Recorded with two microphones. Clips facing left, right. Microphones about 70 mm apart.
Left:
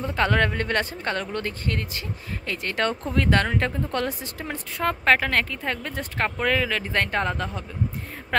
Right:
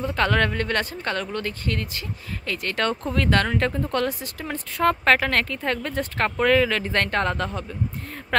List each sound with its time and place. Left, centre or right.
0.1 s a woman's voice: centre
4.7 s a woman's voice: centre